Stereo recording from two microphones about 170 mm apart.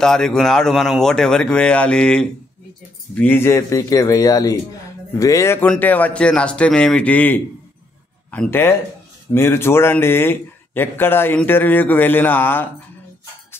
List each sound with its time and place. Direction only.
0.0 s a man's voice: 5° left (ahead or behind)